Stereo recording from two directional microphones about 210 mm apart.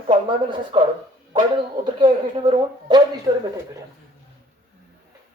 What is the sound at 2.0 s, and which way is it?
Speech, 20° right (ahead or behind).